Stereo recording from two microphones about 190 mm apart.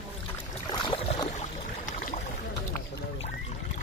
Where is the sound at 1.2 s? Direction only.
40° left (ahead or behind).